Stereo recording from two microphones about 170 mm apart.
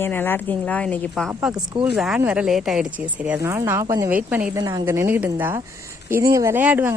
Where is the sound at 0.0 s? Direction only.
10° left (ahead or behind).